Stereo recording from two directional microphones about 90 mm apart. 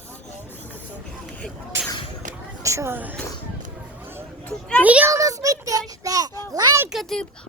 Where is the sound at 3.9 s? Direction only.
25° right (ahead or behind).